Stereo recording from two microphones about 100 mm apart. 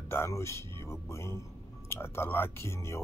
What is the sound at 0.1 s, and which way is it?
Speech, 25° left (ahead or behind).